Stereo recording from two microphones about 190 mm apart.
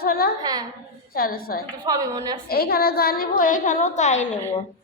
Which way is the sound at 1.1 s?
50° left (ahead or behind).